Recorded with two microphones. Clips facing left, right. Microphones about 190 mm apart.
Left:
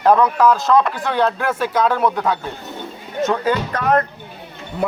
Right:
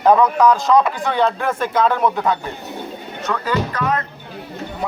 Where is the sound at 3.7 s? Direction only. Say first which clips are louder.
Left 4 dB; 50° left (ahead or behind).